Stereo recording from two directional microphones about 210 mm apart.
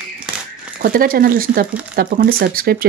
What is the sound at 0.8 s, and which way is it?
Speech, 45° right (ahead or behind).